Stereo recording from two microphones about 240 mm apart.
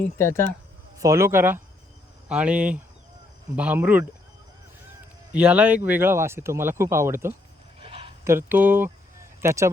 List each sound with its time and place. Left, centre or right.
0.0 s speech: centre
0.9 s speech: centre
5.3 s speech: centre
7.8 s a sound: right
8.2 s speech: centre